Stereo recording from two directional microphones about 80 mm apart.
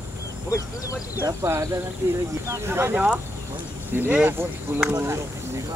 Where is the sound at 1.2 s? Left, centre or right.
Right.